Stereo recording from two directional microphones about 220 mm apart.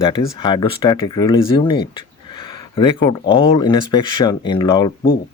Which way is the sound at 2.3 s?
20° left (ahead or behind).